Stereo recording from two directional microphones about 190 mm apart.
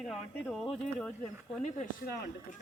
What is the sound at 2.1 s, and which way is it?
Speech, 55° left (ahead or behind).